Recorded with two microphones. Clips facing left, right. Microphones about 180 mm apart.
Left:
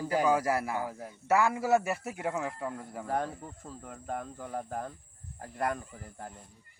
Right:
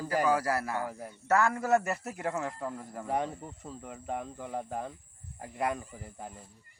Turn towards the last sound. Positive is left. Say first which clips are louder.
# right 1 dB
turn(degrees=-5)  # may be behind; listen again after turning